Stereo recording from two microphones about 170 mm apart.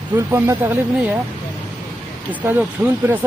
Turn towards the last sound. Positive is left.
turn(degrees=-10)  # may be behind; listen again after turning